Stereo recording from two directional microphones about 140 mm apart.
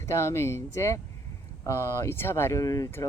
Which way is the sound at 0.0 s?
20° left (ahead or behind).